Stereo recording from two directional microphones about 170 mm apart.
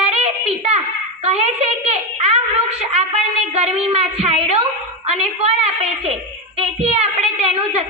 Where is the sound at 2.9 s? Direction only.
40° right (ahead or behind).